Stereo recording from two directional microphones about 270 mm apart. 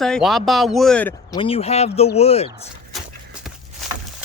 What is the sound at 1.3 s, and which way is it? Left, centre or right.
Speech, left.